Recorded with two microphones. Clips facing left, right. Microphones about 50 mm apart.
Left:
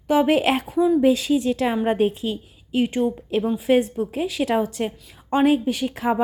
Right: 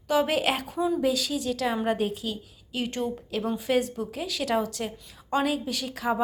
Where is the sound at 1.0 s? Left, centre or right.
Left.